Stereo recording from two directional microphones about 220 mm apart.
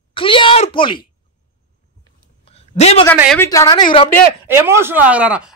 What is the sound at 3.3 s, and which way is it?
Speech, 15° left (ahead or behind).